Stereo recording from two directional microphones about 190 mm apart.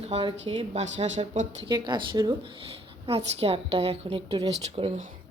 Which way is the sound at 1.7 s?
25° right (ahead or behind).